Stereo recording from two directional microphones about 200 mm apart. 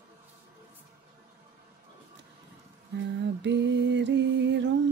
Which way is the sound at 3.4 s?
60° right (ahead or behind).